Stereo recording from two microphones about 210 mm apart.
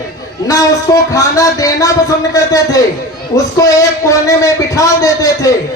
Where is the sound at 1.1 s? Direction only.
15° left (ahead or behind).